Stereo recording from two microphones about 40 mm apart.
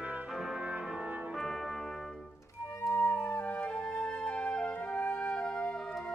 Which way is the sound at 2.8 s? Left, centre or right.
Left.